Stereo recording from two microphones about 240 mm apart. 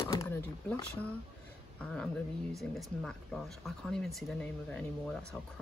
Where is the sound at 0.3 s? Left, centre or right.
Centre.